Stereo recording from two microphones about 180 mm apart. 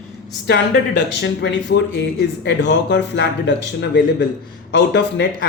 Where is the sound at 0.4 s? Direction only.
75° left (ahead or behind).